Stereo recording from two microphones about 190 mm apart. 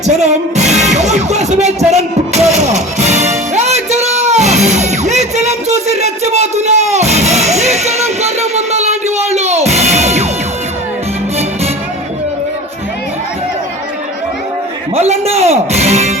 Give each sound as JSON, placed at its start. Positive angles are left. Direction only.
{"t": 0.2, "sound": "music", "side_deg": -35}
{"t": 14.9, "sound": "music", "side_deg": -35}